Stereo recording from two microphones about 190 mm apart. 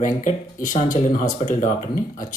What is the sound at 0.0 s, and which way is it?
Speech, 40° left (ahead or behind).